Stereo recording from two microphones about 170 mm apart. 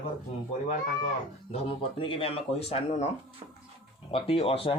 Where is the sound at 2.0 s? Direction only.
30° left (ahead or behind).